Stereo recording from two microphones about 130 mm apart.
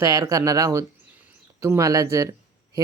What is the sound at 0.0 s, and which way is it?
Speech, 25° right (ahead or behind).